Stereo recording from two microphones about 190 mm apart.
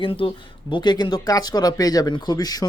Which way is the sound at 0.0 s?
30° left (ahead or behind).